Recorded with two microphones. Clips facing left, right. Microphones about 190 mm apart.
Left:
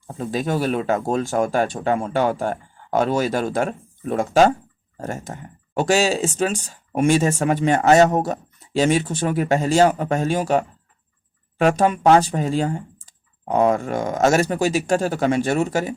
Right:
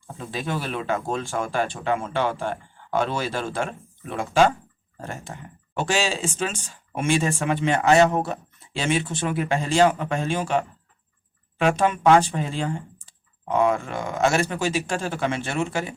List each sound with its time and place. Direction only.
0.2 s speech: 40° left (ahead or behind)